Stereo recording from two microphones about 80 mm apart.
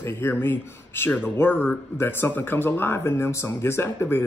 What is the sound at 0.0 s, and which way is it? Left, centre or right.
Speech, left.